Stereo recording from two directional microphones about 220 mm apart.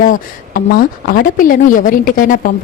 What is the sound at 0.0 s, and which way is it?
A woman's voice, 40° left (ahead or behind).